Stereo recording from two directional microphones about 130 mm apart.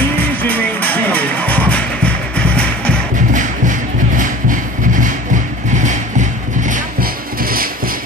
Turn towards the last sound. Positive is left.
turn(degrees=-75)  # may be behind; listen again after turning